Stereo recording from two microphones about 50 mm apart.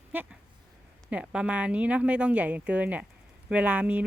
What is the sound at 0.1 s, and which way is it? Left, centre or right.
Speech, right.